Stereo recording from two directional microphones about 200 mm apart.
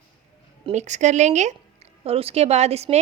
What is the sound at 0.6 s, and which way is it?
A woman's voice, 35° right (ahead or behind).